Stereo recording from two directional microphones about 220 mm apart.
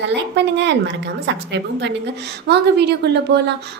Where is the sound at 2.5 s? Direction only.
50° right (ahead or behind).